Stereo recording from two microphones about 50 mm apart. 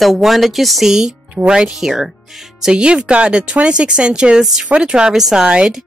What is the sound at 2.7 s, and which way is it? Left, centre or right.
Speech, centre.